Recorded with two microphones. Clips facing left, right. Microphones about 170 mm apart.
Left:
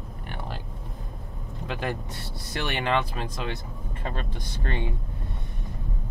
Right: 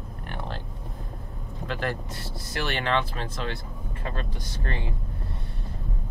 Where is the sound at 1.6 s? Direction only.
15° left (ahead or behind).